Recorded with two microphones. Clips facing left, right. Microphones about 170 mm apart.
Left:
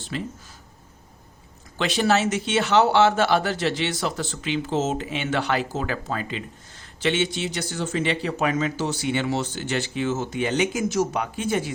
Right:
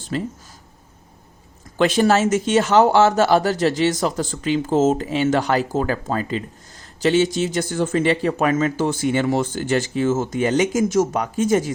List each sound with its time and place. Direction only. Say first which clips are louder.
0.1 s speech: right 6 dB; 40° right (ahead or behind)
1.8 s speech: right 5 dB; 45° right (ahead or behind)